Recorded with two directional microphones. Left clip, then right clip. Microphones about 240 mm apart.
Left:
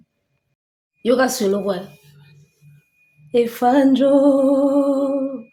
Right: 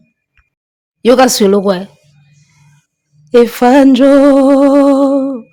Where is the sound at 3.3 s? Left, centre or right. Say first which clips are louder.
Right 9 dB; right.